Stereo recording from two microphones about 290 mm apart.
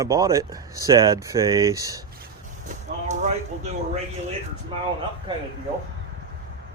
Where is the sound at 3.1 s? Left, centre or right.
Right.